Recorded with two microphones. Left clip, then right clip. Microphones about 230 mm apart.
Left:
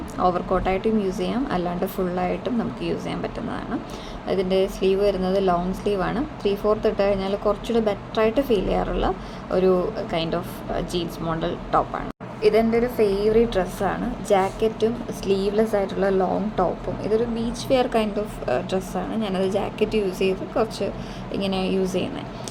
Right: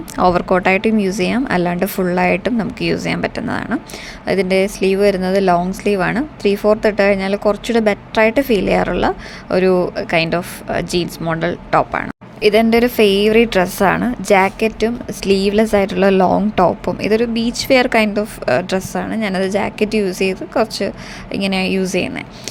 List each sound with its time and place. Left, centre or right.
0.2 s a woman's voice: right